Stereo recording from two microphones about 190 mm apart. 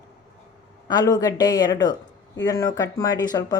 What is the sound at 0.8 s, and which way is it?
Speech, 20° left (ahead or behind).